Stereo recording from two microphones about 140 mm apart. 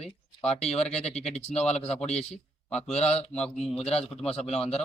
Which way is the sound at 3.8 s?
45° left (ahead or behind).